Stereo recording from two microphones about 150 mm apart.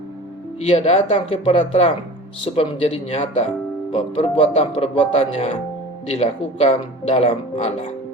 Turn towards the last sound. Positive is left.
turn(degrees=45)  # may be behind; listen again after turning